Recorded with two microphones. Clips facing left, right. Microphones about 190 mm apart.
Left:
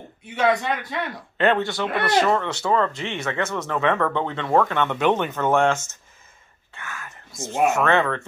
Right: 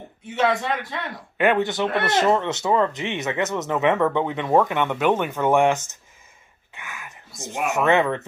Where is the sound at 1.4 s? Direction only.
15° right (ahead or behind).